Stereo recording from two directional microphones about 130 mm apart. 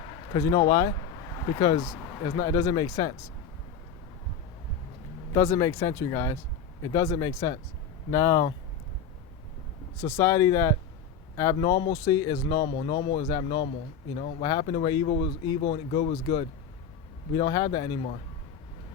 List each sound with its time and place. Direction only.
0.3 s a man's voice: 30° left (ahead or behind)
5.3 s speech: 25° left (ahead or behind)
10.0 s speech: 20° left (ahead or behind)
11.5 s speech: 35° left (ahead or behind)
12.6 s a man's voice: 45° left (ahead or behind); by 13.7 s 30° left (ahead or behind)
14.2 s speech: 65° left (ahead or behind)
14.4 s a man's voice: 40° left (ahead or behind)
15.0 s speech: 55° left (ahead or behind)
15.4 s speech: 40° left (ahead or behind)
17.3 s a man's voice: 35° left (ahead or behind)